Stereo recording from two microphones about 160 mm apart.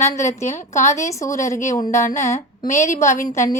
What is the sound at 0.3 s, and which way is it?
Speech, 45° left (ahead or behind).